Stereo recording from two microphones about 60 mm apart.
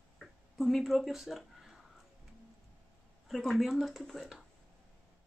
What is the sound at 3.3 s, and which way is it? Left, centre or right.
Speech, centre.